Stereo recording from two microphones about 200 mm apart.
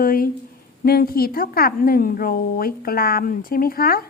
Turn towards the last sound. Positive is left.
turn(degrees=45)  # may be behind; listen again after turning